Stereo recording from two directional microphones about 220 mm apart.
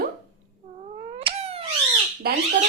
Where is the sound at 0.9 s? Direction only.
25° right (ahead or behind).